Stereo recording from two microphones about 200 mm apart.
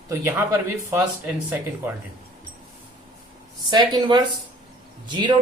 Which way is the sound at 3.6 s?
20° right (ahead or behind).